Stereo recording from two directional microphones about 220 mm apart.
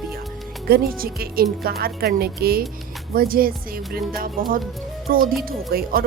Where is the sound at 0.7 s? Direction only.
45° right (ahead or behind).